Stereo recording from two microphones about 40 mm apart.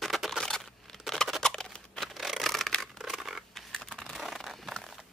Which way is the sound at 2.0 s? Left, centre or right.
Centre.